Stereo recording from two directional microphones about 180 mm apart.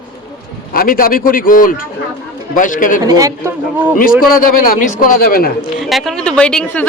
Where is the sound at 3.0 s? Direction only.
20° right (ahead or behind).